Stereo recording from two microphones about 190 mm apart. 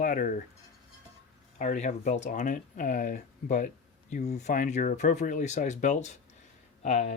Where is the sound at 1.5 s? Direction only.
40° left (ahead or behind).